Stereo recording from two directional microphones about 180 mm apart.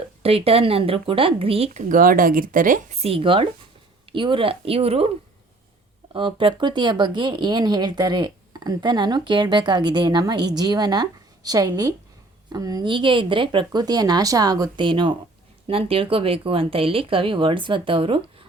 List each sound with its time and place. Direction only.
0.2 s speech: 35° right (ahead or behind); by 2.8 s 50° right (ahead or behind)
3.0 s speech: 30° right (ahead or behind)
6.1 s speech: 30° right (ahead or behind)